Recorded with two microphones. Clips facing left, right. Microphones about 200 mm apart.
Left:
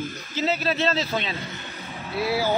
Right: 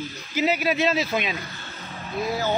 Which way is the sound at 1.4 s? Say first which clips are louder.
Left 3 dB; 20° left (ahead or behind).